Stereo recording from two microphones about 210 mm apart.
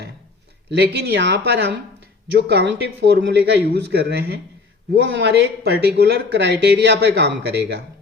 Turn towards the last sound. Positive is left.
turn(degrees=-50)  # may be behind; listen again after turning